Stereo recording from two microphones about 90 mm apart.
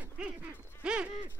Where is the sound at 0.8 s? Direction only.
15° right (ahead or behind).